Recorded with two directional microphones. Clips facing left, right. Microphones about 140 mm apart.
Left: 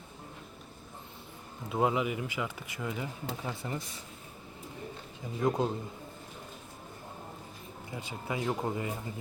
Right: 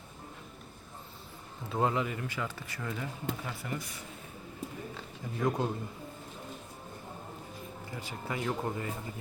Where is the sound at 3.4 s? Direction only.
25° left (ahead or behind).